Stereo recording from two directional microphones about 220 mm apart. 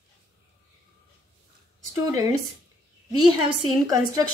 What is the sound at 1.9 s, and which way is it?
Speech, 15° right (ahead or behind).